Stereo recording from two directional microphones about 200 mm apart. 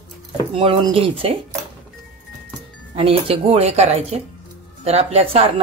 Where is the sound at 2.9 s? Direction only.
30° right (ahead or behind).